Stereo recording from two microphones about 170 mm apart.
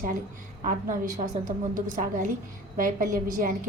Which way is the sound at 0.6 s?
50° right (ahead or behind).